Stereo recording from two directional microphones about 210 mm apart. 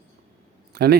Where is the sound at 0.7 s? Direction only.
50° right (ahead or behind).